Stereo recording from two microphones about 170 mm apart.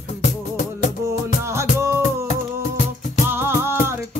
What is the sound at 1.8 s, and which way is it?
Music, 15° right (ahead or behind).